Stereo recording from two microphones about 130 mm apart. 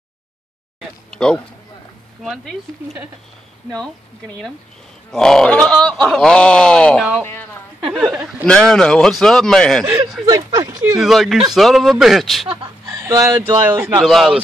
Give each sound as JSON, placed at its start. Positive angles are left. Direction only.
{"t": 0.7, "sound": "a sound", "side_deg": 5}
{"t": 3.7, "sound": "speech", "side_deg": 5}
{"t": 7.8, "sound": "speech", "side_deg": -5}
{"t": 8.5, "sound": "speech", "side_deg": 5}
{"t": 10.2, "sound": "speech", "side_deg": -30}
{"t": 11.0, "sound": "speech", "side_deg": 0}
{"t": 12.4, "sound": "speech", "side_deg": -30}
{"t": 14.0, "sound": "speech", "side_deg": 0}